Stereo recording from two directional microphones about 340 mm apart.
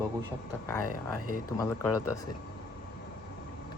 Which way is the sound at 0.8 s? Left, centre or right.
Left.